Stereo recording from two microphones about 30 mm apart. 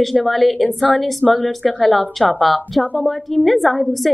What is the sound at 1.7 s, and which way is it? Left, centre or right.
Speech, left.